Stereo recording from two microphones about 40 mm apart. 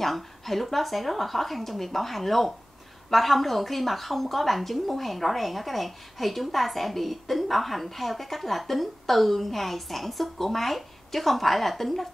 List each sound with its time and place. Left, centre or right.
0.0 s a woman's voice: centre